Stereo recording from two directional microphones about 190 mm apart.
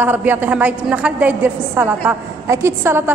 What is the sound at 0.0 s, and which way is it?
A woman's voice, 10° right (ahead or behind).